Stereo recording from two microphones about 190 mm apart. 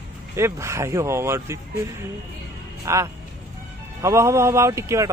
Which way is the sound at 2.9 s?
15° right (ahead or behind).